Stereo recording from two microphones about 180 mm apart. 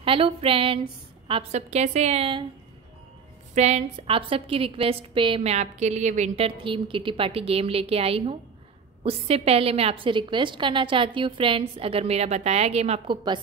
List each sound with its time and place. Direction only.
0.0 s a woman's voice: 30° right (ahead or behind)
3.5 s a woman's voice: 40° right (ahead or behind)